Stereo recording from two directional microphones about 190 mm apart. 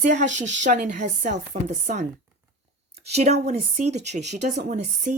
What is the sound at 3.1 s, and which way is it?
Speech, 35° right (ahead or behind).